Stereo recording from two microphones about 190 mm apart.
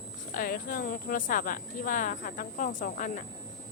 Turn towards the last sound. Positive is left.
turn(degrees=45)  # may be behind; listen again after turning